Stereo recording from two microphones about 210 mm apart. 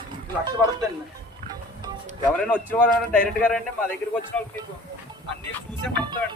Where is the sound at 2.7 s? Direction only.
5° left (ahead or behind).